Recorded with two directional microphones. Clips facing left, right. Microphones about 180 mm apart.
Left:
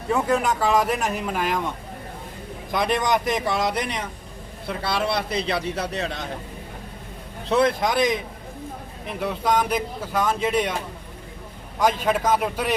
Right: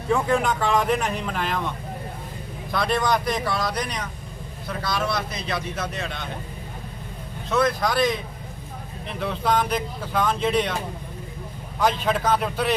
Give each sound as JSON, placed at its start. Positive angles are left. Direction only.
{"t": 0.1, "sound": "speech", "side_deg": 0}
{"t": 2.7, "sound": "a man's voice", "side_deg": 15}
{"t": 7.5, "sound": "speech", "side_deg": 25}
{"t": 11.8, "sound": "speech", "side_deg": 10}